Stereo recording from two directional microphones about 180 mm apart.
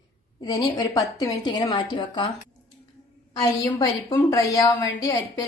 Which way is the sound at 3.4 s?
20° left (ahead or behind).